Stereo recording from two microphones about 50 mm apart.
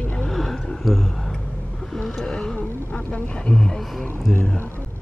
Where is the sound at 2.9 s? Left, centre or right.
Left; by 4.4 s centre.